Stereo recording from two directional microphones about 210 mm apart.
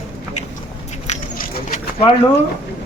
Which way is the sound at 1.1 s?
40° left (ahead or behind).